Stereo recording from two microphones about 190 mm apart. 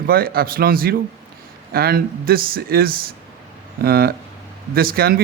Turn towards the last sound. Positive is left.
turn(degrees=-55)  # may be behind; listen again after turning